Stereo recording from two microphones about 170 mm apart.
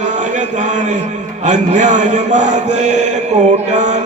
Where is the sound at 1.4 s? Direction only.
45° right (ahead or behind).